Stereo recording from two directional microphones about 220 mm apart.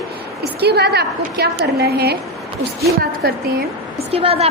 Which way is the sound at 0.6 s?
45° right (ahead or behind).